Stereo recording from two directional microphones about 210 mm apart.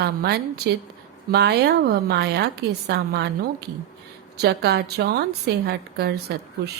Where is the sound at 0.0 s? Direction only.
50° right (ahead or behind).